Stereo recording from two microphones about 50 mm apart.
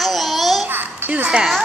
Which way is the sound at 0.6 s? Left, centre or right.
Right.